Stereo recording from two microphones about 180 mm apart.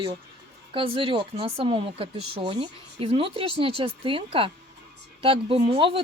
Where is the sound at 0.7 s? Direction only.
30° right (ahead or behind).